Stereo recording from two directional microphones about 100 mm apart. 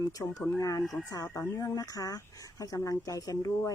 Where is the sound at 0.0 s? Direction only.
35° left (ahead or behind).